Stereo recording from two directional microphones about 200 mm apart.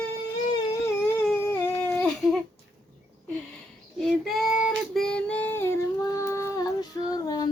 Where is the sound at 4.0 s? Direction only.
Centre (ahead or behind); by 7.5 s 20° left (ahead or behind).